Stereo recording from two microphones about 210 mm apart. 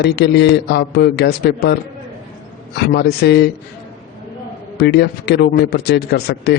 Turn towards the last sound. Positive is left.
turn(degrees=50)  # may be behind; listen again after turning